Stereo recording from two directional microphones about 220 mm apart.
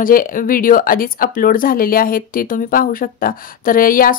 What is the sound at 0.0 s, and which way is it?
Speech, 40° left (ahead or behind).